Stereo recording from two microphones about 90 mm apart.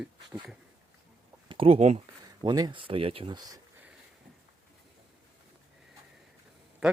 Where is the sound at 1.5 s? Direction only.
85° right.